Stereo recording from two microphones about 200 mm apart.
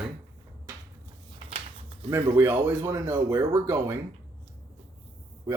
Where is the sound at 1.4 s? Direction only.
25° right (ahead or behind).